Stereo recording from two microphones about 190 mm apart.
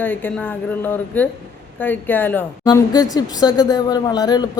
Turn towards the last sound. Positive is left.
turn(degrees=20)  # may be behind; listen again after turning